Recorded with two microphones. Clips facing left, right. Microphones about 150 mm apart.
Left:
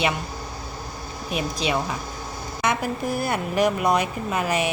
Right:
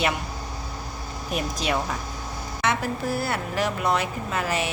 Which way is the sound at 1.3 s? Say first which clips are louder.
Left 1 dB; 45° right (ahead or behind).